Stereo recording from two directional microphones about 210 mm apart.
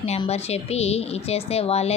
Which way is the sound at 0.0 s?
30° left (ahead or behind).